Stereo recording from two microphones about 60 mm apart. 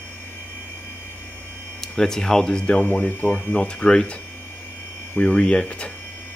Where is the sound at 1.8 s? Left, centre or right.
Centre.